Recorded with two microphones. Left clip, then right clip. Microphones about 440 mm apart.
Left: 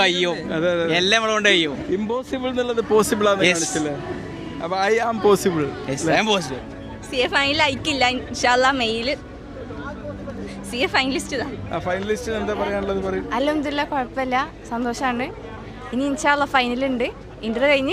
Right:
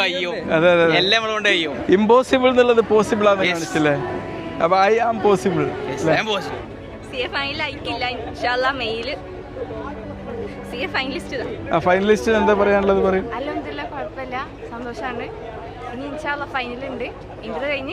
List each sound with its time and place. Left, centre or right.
0.0 s a man's voice: left
0.4 s a man's voice: centre
0.9 s a man's voice: left
1.9 s a man's voice: centre
2.9 s a man's voice: centre
3.4 s a man's voice: left
4.6 s a man's voice: centre
5.9 s a woman's voice: left
7.9 s a woman's voice: left
10.8 s a woman's voice: left
11.7 s a man's voice: centre
13.3 s a woman's voice: left